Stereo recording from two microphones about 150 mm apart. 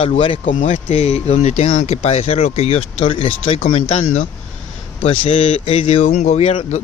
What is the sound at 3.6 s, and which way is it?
Speech, 50° left (ahead or behind).